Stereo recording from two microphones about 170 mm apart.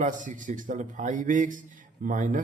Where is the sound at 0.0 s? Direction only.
50° right (ahead or behind).